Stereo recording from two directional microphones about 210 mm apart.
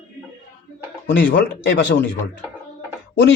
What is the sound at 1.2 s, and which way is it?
Speech, 60° left (ahead or behind).